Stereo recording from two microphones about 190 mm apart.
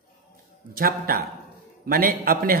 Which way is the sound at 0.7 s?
50° right (ahead or behind).